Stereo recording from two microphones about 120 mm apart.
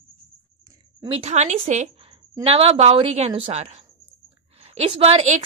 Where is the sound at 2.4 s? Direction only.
55° right (ahead or behind).